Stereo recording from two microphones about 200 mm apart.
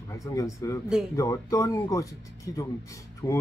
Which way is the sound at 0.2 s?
15° left (ahead or behind).